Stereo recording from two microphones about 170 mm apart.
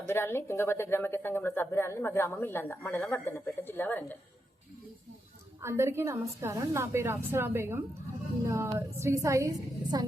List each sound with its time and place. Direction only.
0.1 s speech: 15° left (ahead or behind)
5.6 s a woman's voice: 15° right (ahead or behind)